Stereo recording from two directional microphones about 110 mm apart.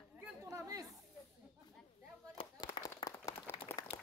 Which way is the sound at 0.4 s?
30° right (ahead or behind).